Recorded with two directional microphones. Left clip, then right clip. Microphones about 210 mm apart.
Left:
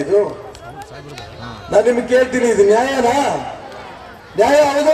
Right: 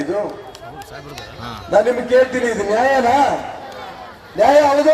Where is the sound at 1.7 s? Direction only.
50° left (ahead or behind).